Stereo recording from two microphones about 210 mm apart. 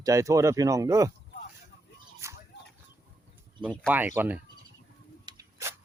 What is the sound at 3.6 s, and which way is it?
Speech, 5° right (ahead or behind).